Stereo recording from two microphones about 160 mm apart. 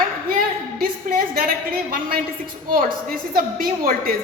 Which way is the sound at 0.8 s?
65° right (ahead or behind).